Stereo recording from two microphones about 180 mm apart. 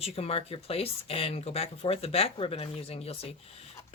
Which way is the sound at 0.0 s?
35° left (ahead or behind).